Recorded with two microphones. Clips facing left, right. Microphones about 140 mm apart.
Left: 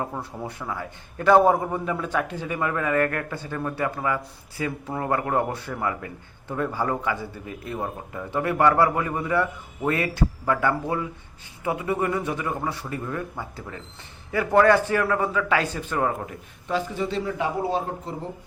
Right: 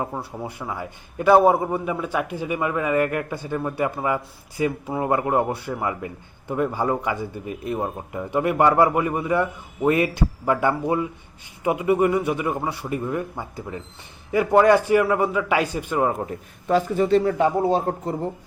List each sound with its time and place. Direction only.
0.0 s a man's voice: 10° right (ahead or behind)
16.2 s a man's voice: 45° right (ahead or behind)